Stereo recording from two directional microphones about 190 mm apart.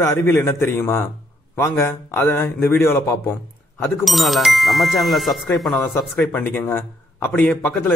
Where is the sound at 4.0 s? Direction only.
Centre (ahead or behind).